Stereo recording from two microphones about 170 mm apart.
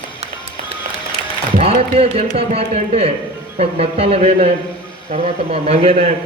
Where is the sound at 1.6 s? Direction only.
35° right (ahead or behind).